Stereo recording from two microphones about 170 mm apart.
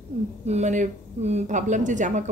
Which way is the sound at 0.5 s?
45° right (ahead or behind).